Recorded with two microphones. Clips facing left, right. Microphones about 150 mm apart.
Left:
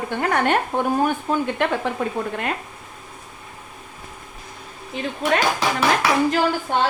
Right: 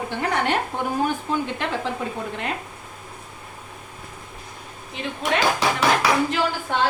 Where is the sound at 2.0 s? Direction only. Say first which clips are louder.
Left 4 dB; 60° left (ahead or behind).